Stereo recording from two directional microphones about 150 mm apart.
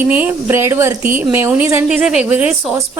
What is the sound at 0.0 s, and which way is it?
A woman's voice, 10° right (ahead or behind).